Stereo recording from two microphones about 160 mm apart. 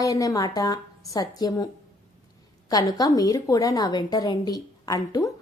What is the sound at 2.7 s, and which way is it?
A woman's voice, 25° left (ahead or behind).